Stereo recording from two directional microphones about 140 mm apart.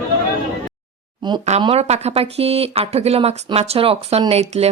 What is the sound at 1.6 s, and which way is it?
Speech, 45° right (ahead or behind).